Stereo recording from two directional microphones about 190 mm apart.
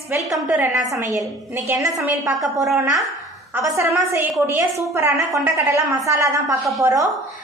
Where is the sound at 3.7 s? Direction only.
15° right (ahead or behind).